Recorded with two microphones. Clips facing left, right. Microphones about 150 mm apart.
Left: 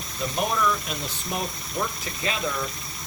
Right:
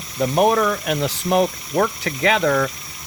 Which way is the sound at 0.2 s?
60° right (ahead or behind).